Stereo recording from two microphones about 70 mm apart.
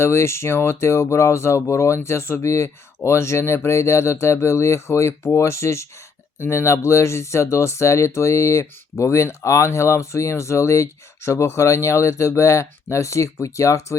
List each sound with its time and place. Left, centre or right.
0.0 s speech: left